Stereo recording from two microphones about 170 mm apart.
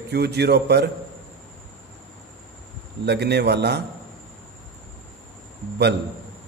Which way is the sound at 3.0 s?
75° right (ahead or behind).